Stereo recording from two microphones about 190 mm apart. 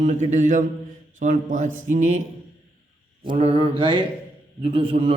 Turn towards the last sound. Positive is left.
turn(degrees=-30)  # may be behind; listen again after turning